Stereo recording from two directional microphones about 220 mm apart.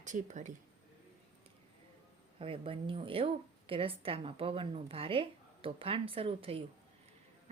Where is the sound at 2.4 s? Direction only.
25° right (ahead or behind).